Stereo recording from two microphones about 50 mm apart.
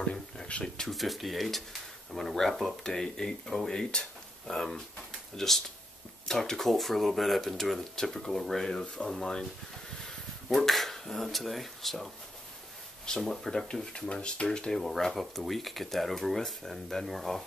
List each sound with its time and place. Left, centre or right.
0.0 s a sound: centre
0.8 s speech: centre
13.2 s speech: centre
14.1 s speech: centre